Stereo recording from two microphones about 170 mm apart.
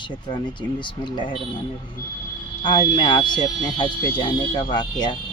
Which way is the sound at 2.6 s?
25° left (ahead or behind).